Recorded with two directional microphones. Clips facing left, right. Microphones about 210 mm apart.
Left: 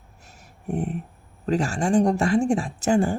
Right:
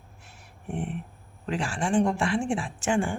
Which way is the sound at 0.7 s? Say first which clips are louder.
Left 5 dB; 40° left (ahead or behind).